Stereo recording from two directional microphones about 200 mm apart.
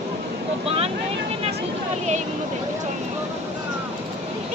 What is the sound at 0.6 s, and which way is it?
Speech, 30° right (ahead or behind).